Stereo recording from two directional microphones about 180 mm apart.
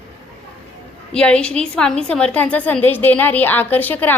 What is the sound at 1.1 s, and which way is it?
A woman's voice, 5° left (ahead or behind).